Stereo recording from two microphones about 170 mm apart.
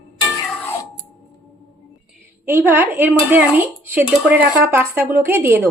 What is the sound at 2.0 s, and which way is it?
Speech, 10° right (ahead or behind).